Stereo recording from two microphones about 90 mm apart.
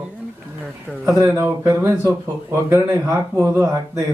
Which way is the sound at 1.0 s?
30° right (ahead or behind).